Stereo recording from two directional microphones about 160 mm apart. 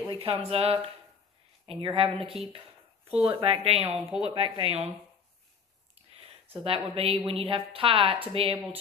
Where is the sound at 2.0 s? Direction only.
35° right (ahead or behind).